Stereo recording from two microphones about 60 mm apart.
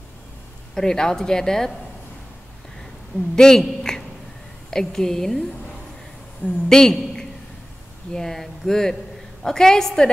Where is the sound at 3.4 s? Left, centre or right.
Centre.